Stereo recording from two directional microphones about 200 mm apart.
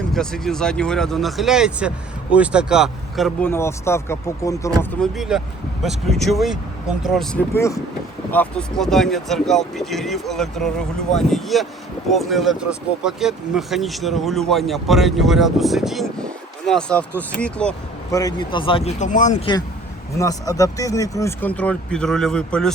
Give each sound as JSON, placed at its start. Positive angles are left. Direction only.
{"t": 0.1, "sound": "speech", "side_deg": 0}
{"t": 3.5, "sound": "speech", "side_deg": 15}
{"t": 4.8, "sound": "speech", "side_deg": 0}
{"t": 7.5, "sound": "speech", "side_deg": 15}
{"t": 18.1, "sound": "speech", "side_deg": 20}
{"t": 20.1, "sound": "speech", "side_deg": 15}